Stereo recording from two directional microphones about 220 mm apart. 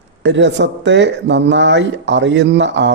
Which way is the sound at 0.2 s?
55° right (ahead or behind).